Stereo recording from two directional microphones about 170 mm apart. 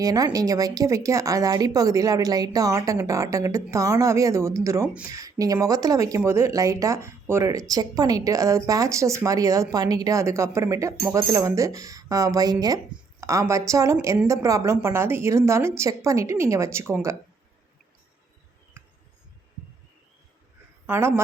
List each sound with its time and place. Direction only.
0.0 s a woman's voice: 20° right (ahead or behind)
20.8 s a woman's voice: 15° right (ahead or behind)